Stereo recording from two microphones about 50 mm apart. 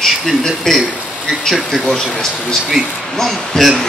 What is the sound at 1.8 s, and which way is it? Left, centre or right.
A man's voice, centre.